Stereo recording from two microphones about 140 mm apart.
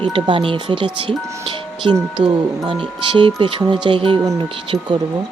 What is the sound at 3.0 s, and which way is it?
Speech, 35° right (ahead or behind).